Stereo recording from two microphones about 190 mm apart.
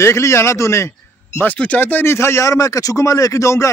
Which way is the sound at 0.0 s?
15° left (ahead or behind).